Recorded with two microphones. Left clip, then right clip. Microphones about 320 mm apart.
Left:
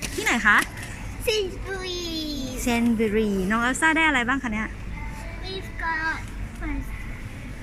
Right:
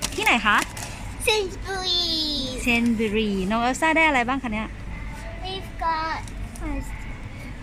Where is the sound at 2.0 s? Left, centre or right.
Right.